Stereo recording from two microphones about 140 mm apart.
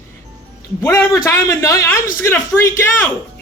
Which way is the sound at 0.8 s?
20° left (ahead or behind).